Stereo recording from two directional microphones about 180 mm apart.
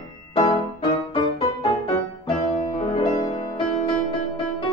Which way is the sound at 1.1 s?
25° left (ahead or behind).